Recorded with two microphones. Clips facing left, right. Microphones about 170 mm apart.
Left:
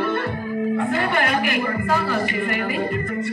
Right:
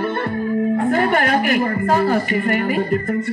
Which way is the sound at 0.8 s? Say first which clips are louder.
Right 4 dB; 45° right (ahead or behind).